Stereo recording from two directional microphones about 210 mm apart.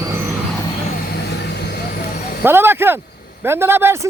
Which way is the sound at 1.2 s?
50° left (ahead or behind).